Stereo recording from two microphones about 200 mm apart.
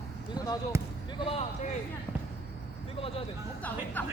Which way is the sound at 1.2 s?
30° left (ahead or behind).